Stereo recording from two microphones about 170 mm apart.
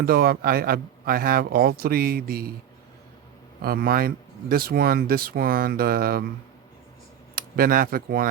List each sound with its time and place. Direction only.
0.0 s speech: 60° right (ahead or behind)
3.6 s speech: 60° right (ahead or behind)
7.3 s speech: 55° right (ahead or behind)